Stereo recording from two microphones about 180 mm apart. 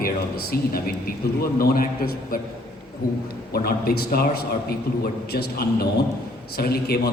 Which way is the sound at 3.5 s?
60° left (ahead or behind).